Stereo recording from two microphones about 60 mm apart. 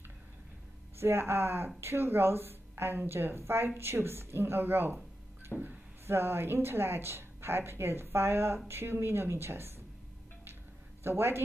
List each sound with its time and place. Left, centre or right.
0.9 s a woman's voice: right
11.1 s a woman's voice: right